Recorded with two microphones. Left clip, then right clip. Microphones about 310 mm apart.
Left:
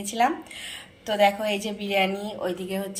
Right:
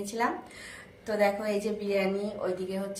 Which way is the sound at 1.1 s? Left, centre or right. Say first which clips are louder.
Left 5 dB; left.